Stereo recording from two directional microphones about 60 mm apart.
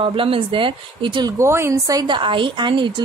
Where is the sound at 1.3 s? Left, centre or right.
Right.